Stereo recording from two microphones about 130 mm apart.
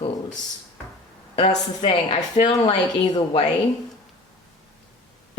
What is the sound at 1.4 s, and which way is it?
Speech, 65° left (ahead or behind).